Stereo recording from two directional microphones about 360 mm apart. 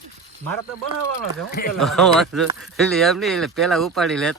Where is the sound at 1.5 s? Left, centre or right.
Left.